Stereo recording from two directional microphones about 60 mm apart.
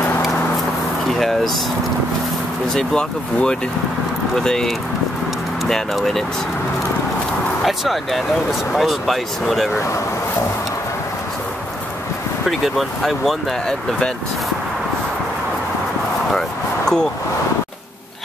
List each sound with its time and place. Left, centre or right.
1.1 s speech: centre
2.7 s speech: centre
4.4 s speech: centre
7.6 s speech: centre
9.8 s speech: left
12.4 s speech: centre
16.3 s vehicle: centre